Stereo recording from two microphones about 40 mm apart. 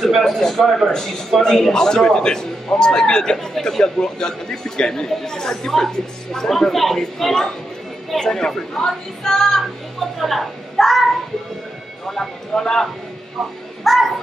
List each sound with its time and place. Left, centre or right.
0.2 s speech: centre
3.3 s speech: centre
6.5 s a woman's voice: centre
12.1 s speech: centre
13.8 s a woman's voice: centre